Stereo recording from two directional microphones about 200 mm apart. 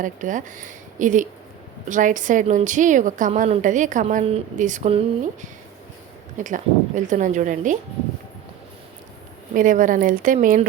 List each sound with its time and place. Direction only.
0.0 s a woman's voice: 40° right (ahead or behind)
9.6 s a woman's voice: 40° right (ahead or behind)